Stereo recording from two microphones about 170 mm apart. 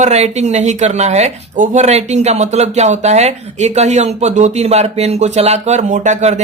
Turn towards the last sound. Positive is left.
turn(degrees=-45)  # may be behind; listen again after turning